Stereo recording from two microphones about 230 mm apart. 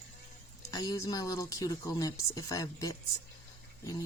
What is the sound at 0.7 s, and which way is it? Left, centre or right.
Speech, centre.